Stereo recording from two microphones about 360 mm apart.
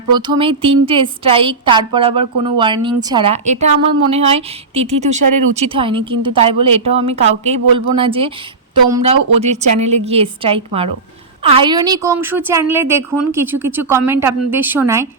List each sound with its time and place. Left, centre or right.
0.1 s a woman's voice: centre